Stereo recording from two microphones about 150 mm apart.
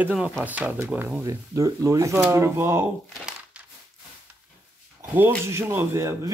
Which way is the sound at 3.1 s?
5° right (ahead or behind).